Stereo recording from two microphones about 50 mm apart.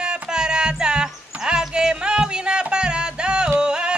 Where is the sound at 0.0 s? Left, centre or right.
Centre.